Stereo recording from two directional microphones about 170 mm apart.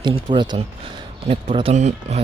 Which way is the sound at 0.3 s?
25° right (ahead or behind).